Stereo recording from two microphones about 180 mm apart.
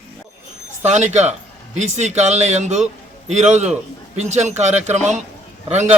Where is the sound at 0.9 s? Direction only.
40° right (ahead or behind).